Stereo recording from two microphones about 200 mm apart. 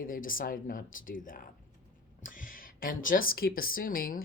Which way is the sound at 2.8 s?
45° left (ahead or behind).